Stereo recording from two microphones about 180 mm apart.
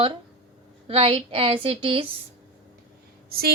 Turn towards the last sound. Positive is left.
turn(degrees=-55)  # may be behind; listen again after turning